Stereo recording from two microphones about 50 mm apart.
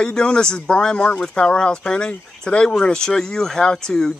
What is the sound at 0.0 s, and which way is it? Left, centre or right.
Speech, centre.